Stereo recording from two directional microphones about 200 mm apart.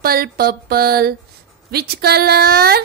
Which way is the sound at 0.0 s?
50° right (ahead or behind).